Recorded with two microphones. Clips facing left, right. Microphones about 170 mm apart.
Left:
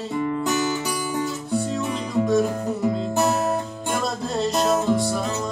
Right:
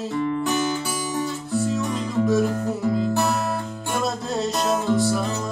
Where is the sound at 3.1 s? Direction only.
20° left (ahead or behind).